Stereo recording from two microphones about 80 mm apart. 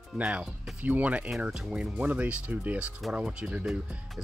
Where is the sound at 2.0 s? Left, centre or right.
Centre.